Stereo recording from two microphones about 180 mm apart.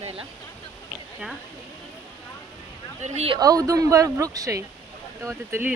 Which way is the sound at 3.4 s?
20° right (ahead or behind).